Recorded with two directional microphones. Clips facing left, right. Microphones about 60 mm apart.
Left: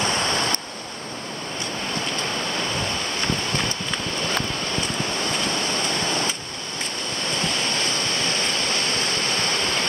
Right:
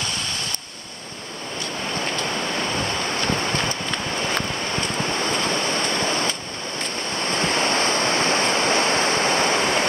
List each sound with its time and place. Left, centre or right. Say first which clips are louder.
0.0 s stream: left 6 dB; left
7.5 s waves: right 5 dB; right; by 9.8 s centre